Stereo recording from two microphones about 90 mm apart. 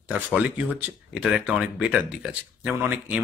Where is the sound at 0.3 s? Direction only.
15° right (ahead or behind).